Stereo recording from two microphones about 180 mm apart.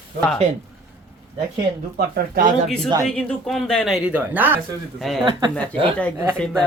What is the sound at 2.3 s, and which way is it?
Speech, 50° right (ahead or behind).